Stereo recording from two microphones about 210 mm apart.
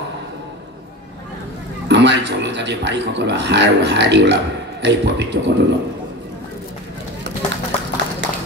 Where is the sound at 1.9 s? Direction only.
55° right (ahead or behind).